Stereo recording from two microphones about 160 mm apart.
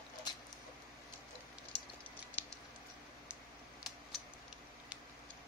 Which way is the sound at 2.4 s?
10° right (ahead or behind).